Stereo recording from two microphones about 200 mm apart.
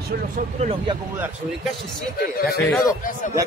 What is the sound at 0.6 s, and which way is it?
Speech, 30° right (ahead or behind).